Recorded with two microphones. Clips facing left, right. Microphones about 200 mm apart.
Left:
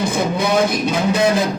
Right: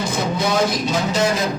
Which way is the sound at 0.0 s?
55° left (ahead or behind).